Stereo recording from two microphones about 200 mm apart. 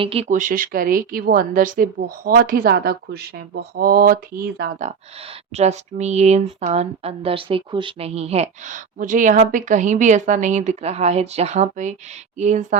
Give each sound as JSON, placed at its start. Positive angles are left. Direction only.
{"t": 0.0, "sound": "a woman's voice", "side_deg": -30}
{"t": 4.8, "sound": "speech", "side_deg": -30}